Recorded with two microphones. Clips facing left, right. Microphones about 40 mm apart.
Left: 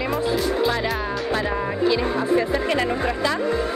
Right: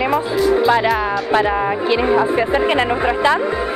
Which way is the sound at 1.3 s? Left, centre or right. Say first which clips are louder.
Right 9 dB; right.